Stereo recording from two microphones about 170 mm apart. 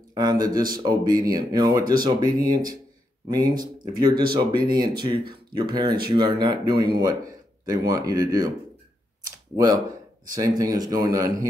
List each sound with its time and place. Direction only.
0.1 s speech: 25° right (ahead or behind)
9.6 s speech: 20° right (ahead or behind)